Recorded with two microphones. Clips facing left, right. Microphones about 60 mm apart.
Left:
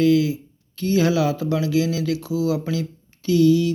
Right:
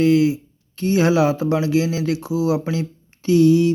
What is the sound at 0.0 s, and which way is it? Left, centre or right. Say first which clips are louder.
Speech: right 2 dB; right.